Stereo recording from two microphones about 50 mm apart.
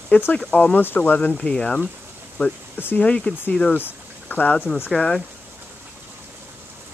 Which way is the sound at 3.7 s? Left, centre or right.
Left.